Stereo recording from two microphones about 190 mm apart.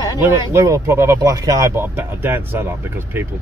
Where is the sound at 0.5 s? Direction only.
15° right (ahead or behind).